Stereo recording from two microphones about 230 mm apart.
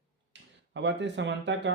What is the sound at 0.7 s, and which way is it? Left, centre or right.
Speech, right.